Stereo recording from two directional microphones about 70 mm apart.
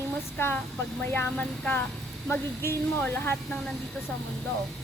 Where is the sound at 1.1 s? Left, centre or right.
Left.